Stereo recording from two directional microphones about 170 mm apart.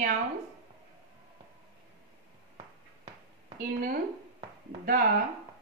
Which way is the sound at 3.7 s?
55° right (ahead or behind).